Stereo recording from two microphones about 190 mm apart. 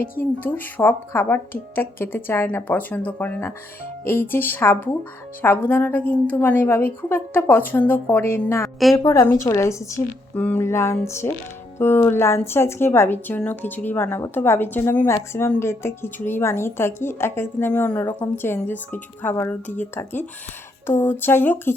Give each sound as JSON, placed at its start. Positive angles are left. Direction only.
{"t": 0.2, "sound": "a woman's voice", "side_deg": 10}